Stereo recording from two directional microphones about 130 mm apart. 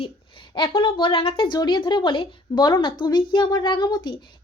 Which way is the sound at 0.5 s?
35° left (ahead or behind).